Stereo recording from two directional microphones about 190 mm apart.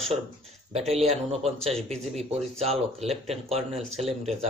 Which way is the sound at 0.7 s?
35° right (ahead or behind).